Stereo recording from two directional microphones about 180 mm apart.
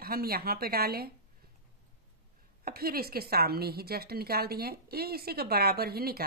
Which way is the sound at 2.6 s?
55° right (ahead or behind).